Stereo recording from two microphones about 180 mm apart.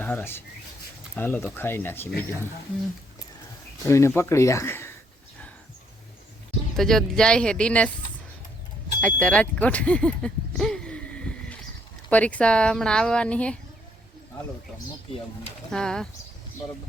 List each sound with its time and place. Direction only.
0.0 s speech: 10° left (ahead or behind)
3.8 s speech: 15° left (ahead or behind)
6.7 s speech: 5° left (ahead or behind)
9.0 s a sound: 5° left (ahead or behind)
12.1 s speech: 5° left (ahead or behind)
15.7 s speech: 5° left (ahead or behind)